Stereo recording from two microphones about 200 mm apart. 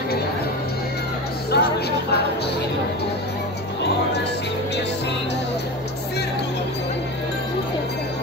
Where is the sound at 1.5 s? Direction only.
55° left (ahead or behind).